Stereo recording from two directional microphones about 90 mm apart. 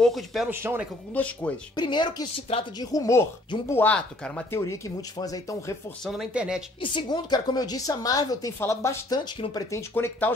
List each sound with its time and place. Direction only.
0.0 s speech: centre (ahead or behind)
0.5 s speech: 25° right (ahead or behind)
1.1 s speech: 15° left (ahead or behind)
1.8 s a woman's voice: 55° left (ahead or behind); by 3.2 s 40° left (ahead or behind)
3.5 s speech: 60° left (ahead or behind)
3.8 s speech: 15° left (ahead or behind)
4.5 s speech: 35° left (ahead or behind)
6.3 s speech: 10° right (ahead or behind)
6.8 s a woman's voice: 60° left (ahead or behind); by 10.3 s 25° left (ahead or behind)